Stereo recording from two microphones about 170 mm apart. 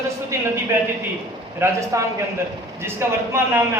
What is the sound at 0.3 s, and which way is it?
A man's voice, 10° right (ahead or behind).